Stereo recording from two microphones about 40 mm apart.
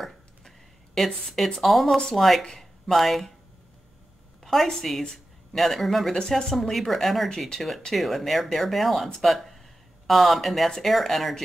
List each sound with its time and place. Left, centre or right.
0.0 s a sound: centre
1.6 s speech: centre
4.5 s speech: centre
5.0 s a sound: centre
5.6 s speech: centre
7.2 s speech: centre
7.9 s speech: centre